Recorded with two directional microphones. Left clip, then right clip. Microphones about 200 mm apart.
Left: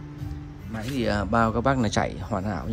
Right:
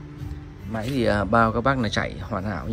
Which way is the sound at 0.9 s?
10° left (ahead or behind).